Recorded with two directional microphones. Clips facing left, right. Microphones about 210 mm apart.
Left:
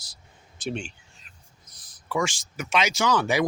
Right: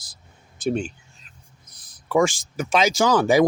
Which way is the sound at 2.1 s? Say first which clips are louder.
Right 8 dB; 35° right (ahead or behind).